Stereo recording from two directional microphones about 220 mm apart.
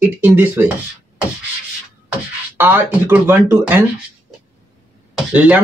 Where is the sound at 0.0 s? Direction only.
10° right (ahead or behind).